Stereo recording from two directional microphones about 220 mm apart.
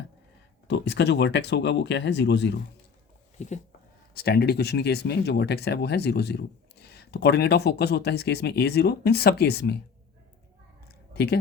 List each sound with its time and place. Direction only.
0.7 s speech: 50° left (ahead or behind)
3.3 s speech: 35° left (ahead or behind)
4.1 s speech: 45° left (ahead or behind)
11.1 s speech: 45° left (ahead or behind)